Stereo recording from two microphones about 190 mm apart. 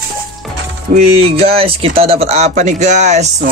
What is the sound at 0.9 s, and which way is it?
Speech, 40° right (ahead or behind).